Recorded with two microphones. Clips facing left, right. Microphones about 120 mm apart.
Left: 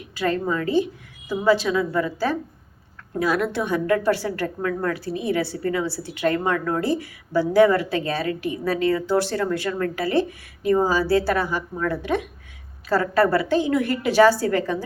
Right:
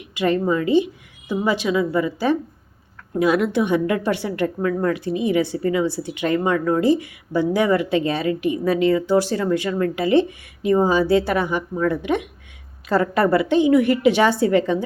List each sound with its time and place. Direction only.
0.1 s a woman's voice: 15° right (ahead or behind)